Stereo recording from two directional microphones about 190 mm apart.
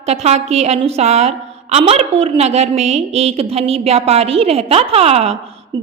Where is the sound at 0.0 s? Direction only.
35° right (ahead or behind).